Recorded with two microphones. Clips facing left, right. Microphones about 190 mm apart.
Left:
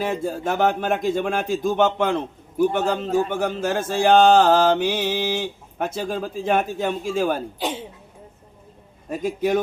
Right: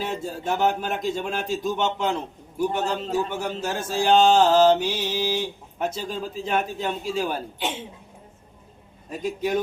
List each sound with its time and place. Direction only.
0.0 s speech: 50° left (ahead or behind)
9.0 s speech: 50° left (ahead or behind)